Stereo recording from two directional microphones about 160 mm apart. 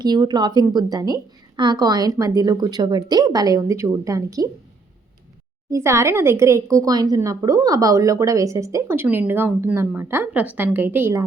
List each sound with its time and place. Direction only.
0.0 s a woman's voice: 25° right (ahead or behind)
5.7 s a woman's voice: 20° right (ahead or behind)